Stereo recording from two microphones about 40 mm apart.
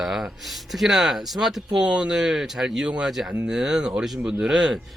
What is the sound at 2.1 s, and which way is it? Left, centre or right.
Speech, centre.